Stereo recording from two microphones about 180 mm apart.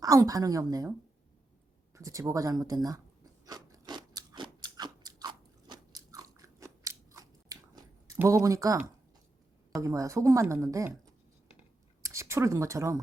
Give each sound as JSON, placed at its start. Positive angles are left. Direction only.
{"t": 0.0, "sound": "speech", "side_deg": -20}
{"t": 2.0, "sound": "speech", "side_deg": -15}
{"t": 3.4, "sound": "crunch", "side_deg": -20}
{"t": 8.0, "sound": "speech", "side_deg": -15}
{"t": 12.0, "sound": "speech", "side_deg": -15}